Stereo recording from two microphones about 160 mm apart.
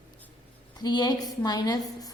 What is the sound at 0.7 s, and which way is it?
A woman's voice, 25° left (ahead or behind).